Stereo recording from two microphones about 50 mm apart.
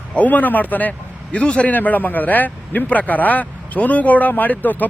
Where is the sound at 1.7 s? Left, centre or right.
Left.